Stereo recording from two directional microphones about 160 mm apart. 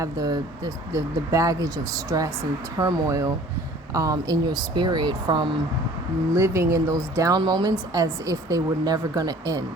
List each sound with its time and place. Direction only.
0.0 s a woman's voice: 25° right (ahead or behind)